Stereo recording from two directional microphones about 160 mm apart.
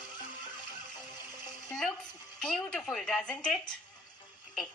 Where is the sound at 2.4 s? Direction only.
5° left (ahead or behind).